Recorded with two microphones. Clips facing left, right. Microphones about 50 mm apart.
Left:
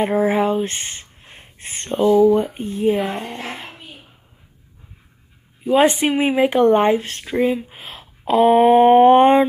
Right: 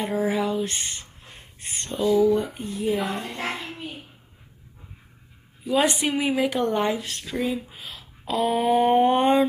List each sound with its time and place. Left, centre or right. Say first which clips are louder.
0.0 s speech: left 7 dB; left
5.6 s speech: left 7 dB; left